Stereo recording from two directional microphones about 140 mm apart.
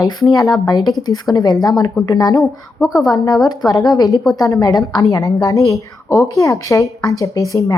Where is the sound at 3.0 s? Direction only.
25° left (ahead or behind).